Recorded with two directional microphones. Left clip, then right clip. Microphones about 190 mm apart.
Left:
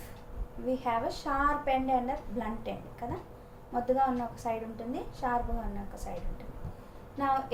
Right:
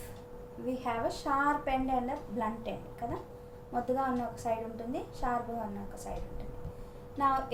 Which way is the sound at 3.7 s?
10° right (ahead or behind).